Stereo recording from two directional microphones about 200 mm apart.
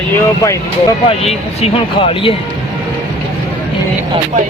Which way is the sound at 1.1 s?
30° left (ahead or behind).